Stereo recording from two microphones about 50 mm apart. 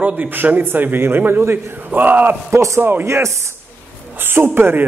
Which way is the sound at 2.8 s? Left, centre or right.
Right.